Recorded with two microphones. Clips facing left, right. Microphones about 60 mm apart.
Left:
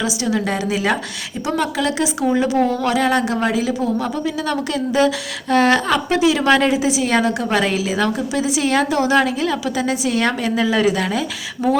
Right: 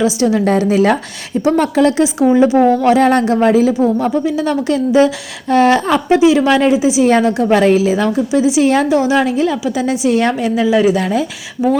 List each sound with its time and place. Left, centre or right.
0.0 s a woman's voice: right
11.6 s speech: centre